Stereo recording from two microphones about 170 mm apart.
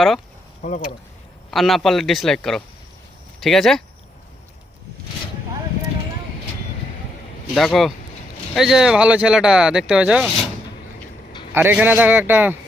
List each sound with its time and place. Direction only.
0.6 s speech: 45° left (ahead or behind)
1.5 s speech: centre (ahead or behind)
7.5 s speech: centre (ahead or behind)
11.5 s a man's voice: 10° right (ahead or behind)